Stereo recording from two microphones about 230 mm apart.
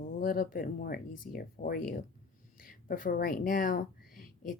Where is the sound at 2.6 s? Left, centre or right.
Left.